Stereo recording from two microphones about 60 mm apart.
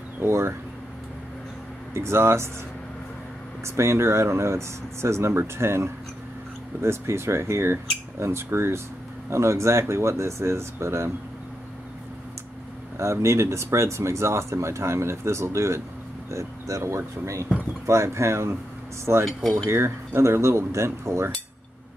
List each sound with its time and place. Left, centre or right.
0.2 s speech: right
2.0 s speech: right
3.6 s speech: right
12.9 s speech: right